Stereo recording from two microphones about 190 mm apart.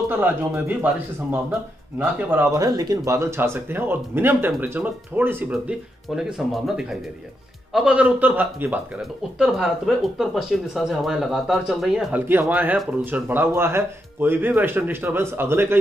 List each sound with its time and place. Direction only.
0.1 s speech: 10° right (ahead or behind)
2.0 s speech: 10° right (ahead or behind)